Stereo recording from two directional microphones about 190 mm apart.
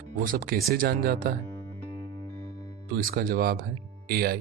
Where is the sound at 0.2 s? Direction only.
45° right (ahead or behind).